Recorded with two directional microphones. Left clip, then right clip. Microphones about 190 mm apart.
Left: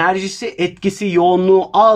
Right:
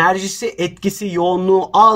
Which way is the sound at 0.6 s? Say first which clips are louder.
Left 2 dB; 40° left (ahead or behind).